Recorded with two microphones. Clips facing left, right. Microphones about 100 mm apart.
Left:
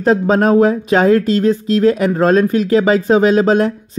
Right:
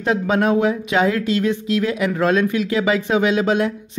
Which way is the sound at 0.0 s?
40° left (ahead or behind).